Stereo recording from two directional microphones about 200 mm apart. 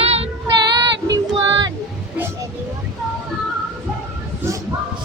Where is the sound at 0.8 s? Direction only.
20° right (ahead or behind).